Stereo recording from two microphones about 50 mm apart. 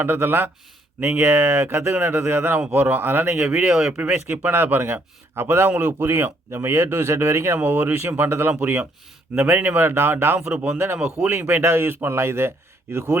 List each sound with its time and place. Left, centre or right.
0.0 s speech: right
3.7 s speech: centre
4.3 s speech: right
5.3 s speech: right
7.6 s speech: right
9.3 s speech: right
10.4 s speech: right
10.8 s speech: right
11.5 s speech: right